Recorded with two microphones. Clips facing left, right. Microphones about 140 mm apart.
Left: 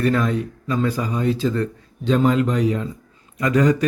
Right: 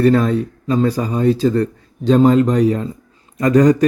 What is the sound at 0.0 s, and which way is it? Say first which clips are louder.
A man's voice: right 6 dB; 35° right (ahead or behind).